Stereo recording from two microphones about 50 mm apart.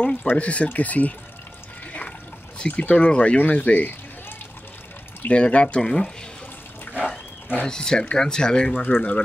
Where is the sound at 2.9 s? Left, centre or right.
Left.